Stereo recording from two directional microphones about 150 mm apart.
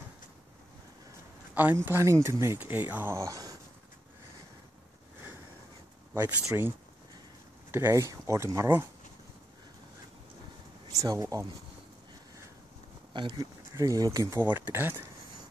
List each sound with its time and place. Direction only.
1.5 s a woman's voice: 10° right (ahead or behind)
6.1 s speech: 20° right (ahead or behind)
7.7 s speech: 20° right (ahead or behind)
11.0 s speech: 20° right (ahead or behind)
13.1 s speech: 30° right (ahead or behind)
14.4 s speech: 10° right (ahead or behind)